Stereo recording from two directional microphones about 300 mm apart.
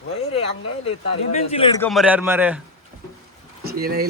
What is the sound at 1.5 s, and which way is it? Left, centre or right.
Speech, centre.